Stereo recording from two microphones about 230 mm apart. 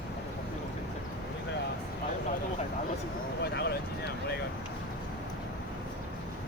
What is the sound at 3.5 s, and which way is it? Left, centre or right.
Vehicle, left.